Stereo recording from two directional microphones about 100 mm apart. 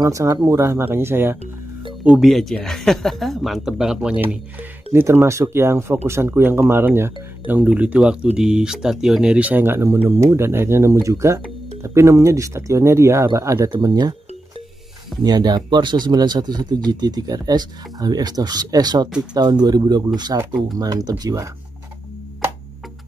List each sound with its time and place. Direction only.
0.0 s speech: 35° right (ahead or behind)
2.0 s speech: centre (ahead or behind); by 13.7 s 30° right (ahead or behind)
13.7 s speech: 45° right (ahead or behind)
15.2 s speech: 45° right (ahead or behind)